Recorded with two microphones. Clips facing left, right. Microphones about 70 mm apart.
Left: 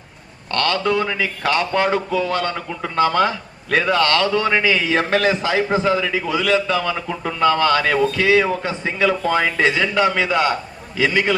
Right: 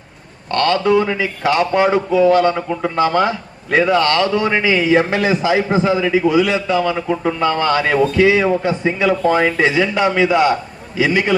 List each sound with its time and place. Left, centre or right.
0.5 s a man's voice: right
0.9 s a man's voice: centre
4.0 s a man's voice: right